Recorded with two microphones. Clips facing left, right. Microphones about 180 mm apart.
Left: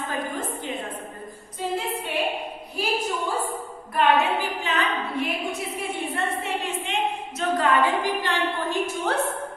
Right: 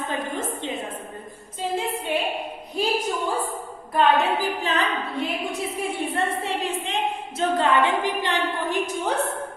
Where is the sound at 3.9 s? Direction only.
35° right (ahead or behind).